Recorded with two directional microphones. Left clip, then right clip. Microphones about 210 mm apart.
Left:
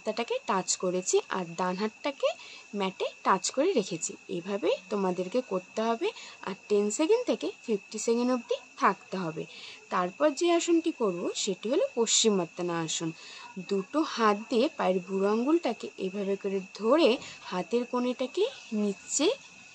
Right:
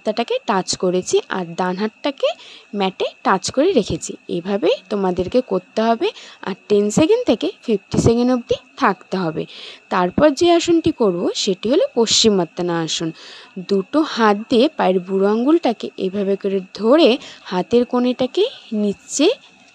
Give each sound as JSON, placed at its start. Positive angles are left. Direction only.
{"t": 0.0, "sound": "speech", "side_deg": -30}